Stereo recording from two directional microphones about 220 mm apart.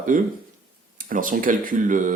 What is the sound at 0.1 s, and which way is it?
Speech, 35° right (ahead or behind).